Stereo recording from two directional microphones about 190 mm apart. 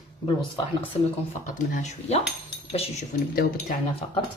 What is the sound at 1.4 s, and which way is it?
Speech, 40° left (ahead or behind).